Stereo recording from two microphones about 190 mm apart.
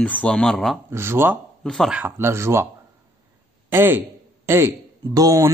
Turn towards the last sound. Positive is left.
turn(degrees=-20)  # may be behind; listen again after turning